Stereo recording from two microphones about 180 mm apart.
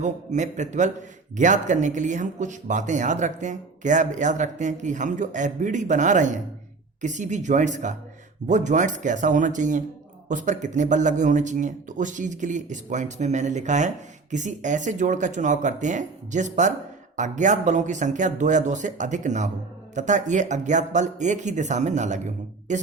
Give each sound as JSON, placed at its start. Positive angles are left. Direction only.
{"t": 0.0, "sound": "a man's voice", "side_deg": -40}